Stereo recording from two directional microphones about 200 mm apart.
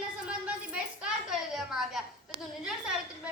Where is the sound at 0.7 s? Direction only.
5° right (ahead or behind).